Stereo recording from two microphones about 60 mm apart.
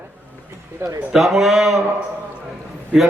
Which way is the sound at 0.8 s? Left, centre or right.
Right.